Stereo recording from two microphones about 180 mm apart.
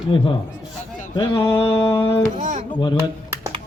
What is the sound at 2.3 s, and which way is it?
Speech, 45° right (ahead or behind).